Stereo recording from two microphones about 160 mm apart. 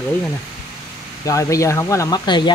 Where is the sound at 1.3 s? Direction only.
20° left (ahead or behind).